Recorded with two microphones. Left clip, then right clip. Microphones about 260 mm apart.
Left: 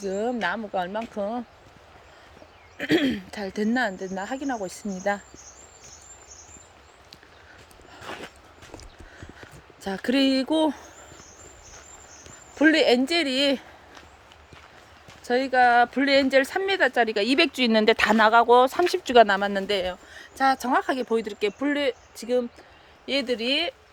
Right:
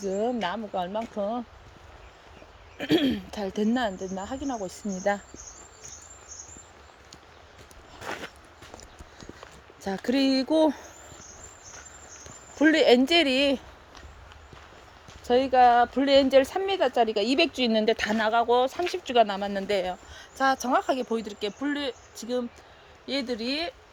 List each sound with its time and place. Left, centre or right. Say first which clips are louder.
0.0 s speech: left 1 dB; centre
2.7 s speech: left 1 dB; centre
9.8 s speech: left 2 dB; centre
12.5 s speech: even; centre
15.2 s speech: right 1 dB; centre